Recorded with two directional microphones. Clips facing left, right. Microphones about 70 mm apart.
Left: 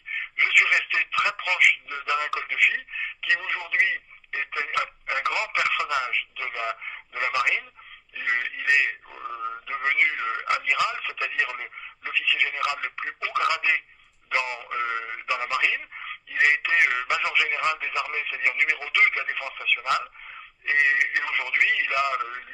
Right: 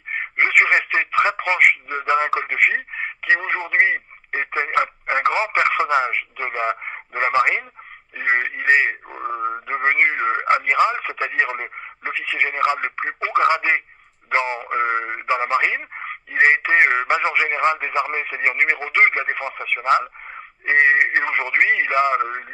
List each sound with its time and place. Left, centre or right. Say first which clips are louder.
0.1 s speech: right 5 dB; right